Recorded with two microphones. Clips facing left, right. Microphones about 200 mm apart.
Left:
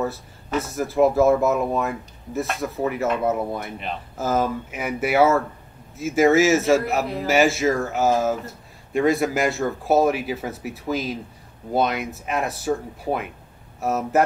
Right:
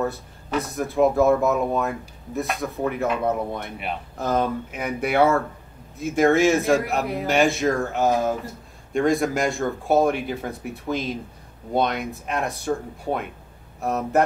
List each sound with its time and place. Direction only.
0.0 s speech: centre (ahead or behind)